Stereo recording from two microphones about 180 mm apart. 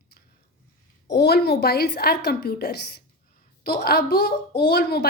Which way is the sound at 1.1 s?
65° left (ahead or behind).